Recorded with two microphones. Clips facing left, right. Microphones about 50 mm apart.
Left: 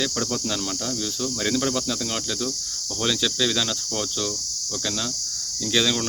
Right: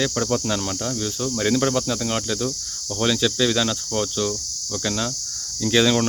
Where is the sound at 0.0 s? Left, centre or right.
Centre.